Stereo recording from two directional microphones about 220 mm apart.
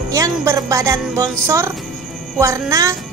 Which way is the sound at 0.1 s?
15° right (ahead or behind).